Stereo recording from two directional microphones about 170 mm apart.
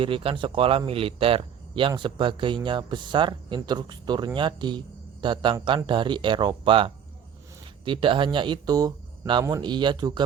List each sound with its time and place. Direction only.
0.0 s speech: 30° right (ahead or behind)